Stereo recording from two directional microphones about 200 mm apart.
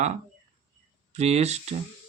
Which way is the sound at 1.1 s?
35° right (ahead or behind).